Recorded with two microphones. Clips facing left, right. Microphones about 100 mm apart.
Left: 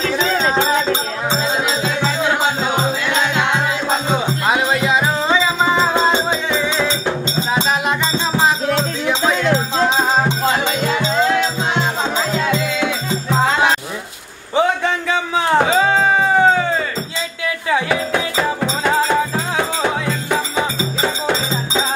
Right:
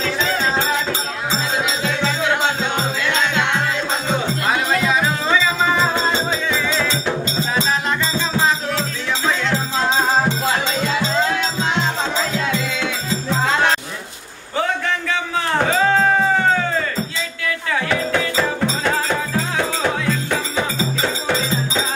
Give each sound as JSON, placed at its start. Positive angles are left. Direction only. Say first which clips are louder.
{"t": 0.0, "sound": "music", "louder": "left 3 dB", "side_deg": 20}
{"t": 4.5, "sound": "music", "louder": "left 2 dB", "side_deg": 20}
{"t": 8.4, "sound": "music", "louder": "left 3 dB", "side_deg": 20}
{"t": 13.5, "sound": "music", "louder": "even", "side_deg": 5}
{"t": 14.5, "sound": "a sound", "louder": "left 5 dB", "side_deg": 15}
{"t": 15.6, "sound": "music", "louder": "left 1 dB", "side_deg": 10}
{"t": 17.6, "sound": "music", "louder": "left 3 dB", "side_deg": 15}
{"t": 19.8, "sound": "music", "louder": "left 1 dB", "side_deg": 10}